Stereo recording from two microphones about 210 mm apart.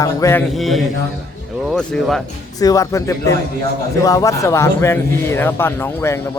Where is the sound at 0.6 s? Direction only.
Centre (ahead or behind).